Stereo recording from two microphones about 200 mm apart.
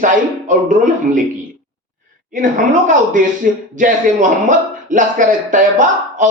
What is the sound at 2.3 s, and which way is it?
Speech, 40° right (ahead or behind).